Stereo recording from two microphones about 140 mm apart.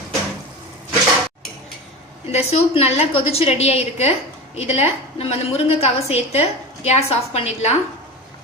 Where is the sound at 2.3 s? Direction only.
45° left (ahead or behind).